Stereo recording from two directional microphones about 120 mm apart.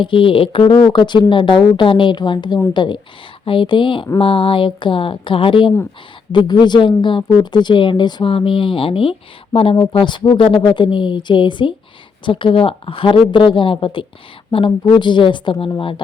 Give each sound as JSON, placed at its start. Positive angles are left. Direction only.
{"t": 0.0, "sound": "speech", "side_deg": 45}